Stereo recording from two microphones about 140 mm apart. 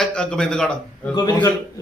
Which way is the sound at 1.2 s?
25° left (ahead or behind).